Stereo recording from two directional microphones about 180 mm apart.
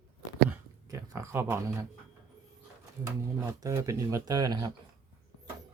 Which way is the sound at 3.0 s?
15° right (ahead or behind).